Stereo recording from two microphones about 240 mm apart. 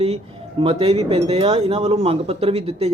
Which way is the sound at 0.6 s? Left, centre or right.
Right.